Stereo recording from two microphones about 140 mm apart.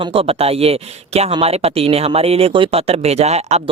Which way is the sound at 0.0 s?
40° right (ahead or behind).